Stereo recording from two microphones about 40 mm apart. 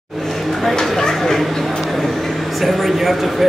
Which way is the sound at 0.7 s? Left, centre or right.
Centre.